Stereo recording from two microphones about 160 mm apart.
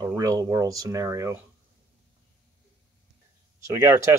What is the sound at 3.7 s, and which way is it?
Speech, 20° right (ahead or behind).